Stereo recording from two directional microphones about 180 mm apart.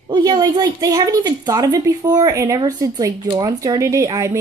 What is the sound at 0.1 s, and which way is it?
A woman's voice, 25° right (ahead or behind).